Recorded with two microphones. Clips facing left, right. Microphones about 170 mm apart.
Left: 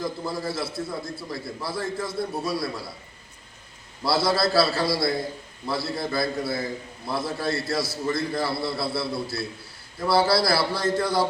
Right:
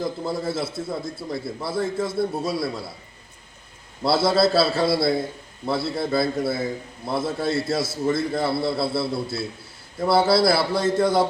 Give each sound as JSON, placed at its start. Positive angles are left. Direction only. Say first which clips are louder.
{"t": 0.3, "sound": "a man's voice", "louder": "right 3 dB", "side_deg": -25}
{"t": 4.0, "sound": "a man's voice", "louder": "right 4 dB", "side_deg": -25}